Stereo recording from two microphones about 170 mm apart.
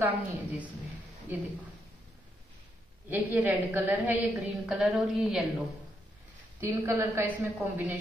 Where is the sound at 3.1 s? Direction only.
10° right (ahead or behind).